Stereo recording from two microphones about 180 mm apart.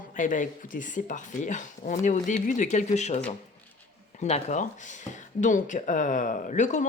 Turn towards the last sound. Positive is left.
turn(degrees=40)  # may be behind; listen again after turning